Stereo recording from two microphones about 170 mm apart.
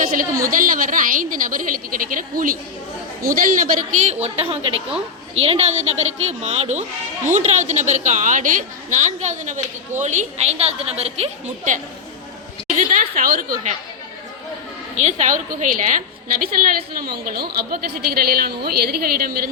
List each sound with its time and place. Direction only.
0.0 s a woman's voice: 55° right (ahead or behind)
12.7 s a sound: 50° right (ahead or behind)
14.9 s a woman's voice: 45° right (ahead or behind); by 19.5 s 60° right (ahead or behind)